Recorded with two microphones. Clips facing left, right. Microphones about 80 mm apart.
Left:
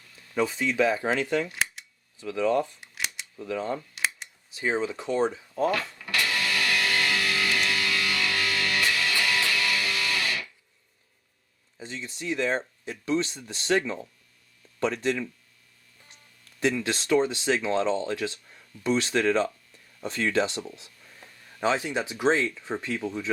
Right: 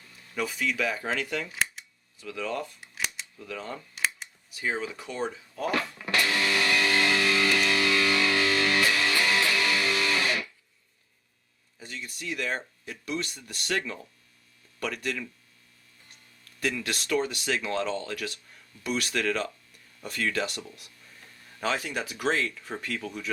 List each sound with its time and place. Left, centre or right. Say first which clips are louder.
0.3 s speech: left 5 dB; left
1.5 s camera: even; centre
2.2 s speech: left 8 dB; centre
2.8 s camera: even; centre
3.3 s speech: left 12 dB; centre
3.8 s camera: even; centre
4.5 s speech: left 4 dB; left
5.7 s music: right 1 dB; right
11.8 s speech: left 3 dB; left
16.6 s speech: left 5 dB; left